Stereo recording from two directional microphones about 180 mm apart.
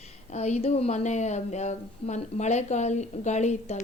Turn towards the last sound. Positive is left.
turn(degrees=40)  # may be behind; listen again after turning